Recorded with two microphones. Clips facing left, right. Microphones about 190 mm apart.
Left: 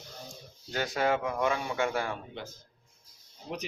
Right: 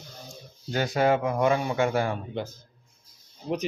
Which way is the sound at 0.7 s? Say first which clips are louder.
Right 5 dB; 40° right (ahead or behind).